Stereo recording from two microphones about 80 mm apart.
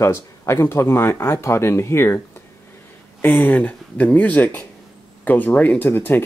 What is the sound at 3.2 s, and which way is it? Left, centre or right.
Speech, left.